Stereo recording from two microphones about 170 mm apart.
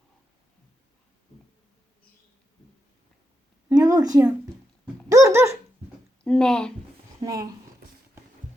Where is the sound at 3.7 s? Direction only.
20° right (ahead or behind).